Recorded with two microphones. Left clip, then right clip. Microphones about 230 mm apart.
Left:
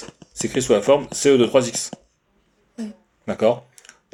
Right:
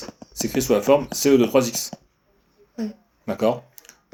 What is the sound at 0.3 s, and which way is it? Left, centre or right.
Speech, left.